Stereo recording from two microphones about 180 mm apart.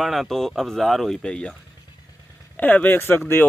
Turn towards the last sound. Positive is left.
turn(degrees=10)  # may be behind; listen again after turning